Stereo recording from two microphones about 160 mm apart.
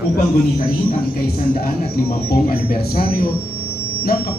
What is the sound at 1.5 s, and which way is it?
A man's voice, 70° left (ahead or behind).